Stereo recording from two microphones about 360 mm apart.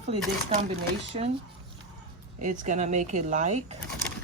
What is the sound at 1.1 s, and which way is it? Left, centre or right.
Speech, centre.